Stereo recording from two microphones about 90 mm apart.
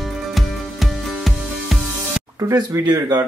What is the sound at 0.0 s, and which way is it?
Music, centre (ahead or behind).